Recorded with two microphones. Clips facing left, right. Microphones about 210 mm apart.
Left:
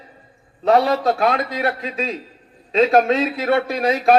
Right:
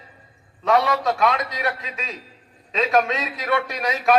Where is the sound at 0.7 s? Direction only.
35° left (ahead or behind).